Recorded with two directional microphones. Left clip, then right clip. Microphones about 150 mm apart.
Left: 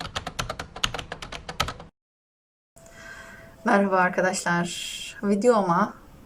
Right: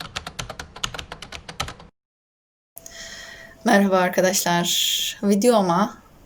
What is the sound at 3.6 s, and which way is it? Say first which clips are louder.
A woman's voice: right 3 dB; 10° left (ahead or behind).